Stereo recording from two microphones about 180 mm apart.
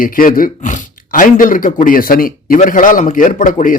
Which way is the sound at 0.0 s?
50° left (ahead or behind).